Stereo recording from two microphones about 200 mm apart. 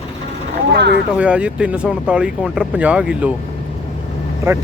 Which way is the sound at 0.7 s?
60° right (ahead or behind).